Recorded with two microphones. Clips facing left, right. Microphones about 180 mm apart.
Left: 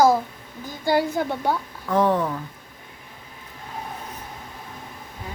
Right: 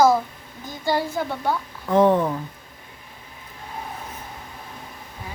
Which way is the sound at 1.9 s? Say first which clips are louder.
Right 3 dB; 20° right (ahead or behind).